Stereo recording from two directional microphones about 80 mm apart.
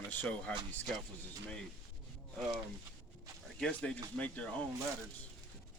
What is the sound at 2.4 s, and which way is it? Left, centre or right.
Speech, centre.